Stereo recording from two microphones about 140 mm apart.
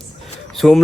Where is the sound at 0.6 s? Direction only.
Centre (ahead or behind).